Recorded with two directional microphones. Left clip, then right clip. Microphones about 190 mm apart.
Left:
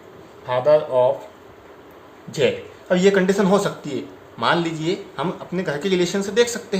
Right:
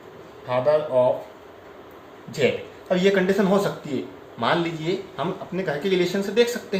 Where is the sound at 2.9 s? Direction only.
45° left (ahead or behind).